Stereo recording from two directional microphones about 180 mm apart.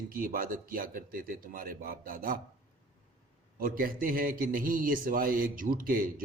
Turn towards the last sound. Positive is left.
turn(degrees=-50)  # may be behind; listen again after turning